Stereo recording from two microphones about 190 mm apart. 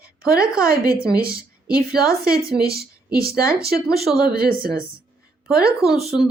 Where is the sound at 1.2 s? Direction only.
50° right (ahead or behind).